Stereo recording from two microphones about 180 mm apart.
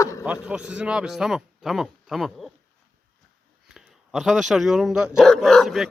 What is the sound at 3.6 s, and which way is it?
Speech, centre (ahead or behind).